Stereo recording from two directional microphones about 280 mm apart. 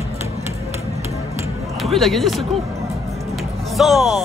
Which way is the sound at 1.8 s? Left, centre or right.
Centre.